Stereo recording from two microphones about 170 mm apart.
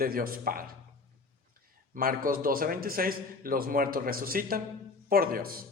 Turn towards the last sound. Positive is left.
turn(degrees=-60)  # may be behind; listen again after turning